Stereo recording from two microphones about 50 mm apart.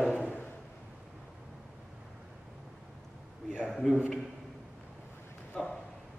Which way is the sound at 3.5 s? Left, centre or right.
Centre.